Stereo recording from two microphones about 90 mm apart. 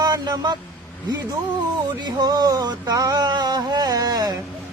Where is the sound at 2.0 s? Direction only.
50° right (ahead or behind).